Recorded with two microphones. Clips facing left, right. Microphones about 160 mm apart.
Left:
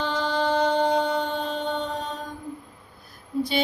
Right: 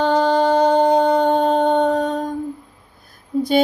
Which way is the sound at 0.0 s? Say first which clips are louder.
Right 9 dB; 45° right (ahead or behind).